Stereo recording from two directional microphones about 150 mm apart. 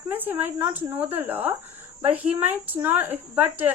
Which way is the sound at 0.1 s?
10° right (ahead or behind).